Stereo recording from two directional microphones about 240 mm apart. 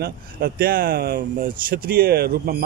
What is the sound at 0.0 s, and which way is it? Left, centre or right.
Speech, right.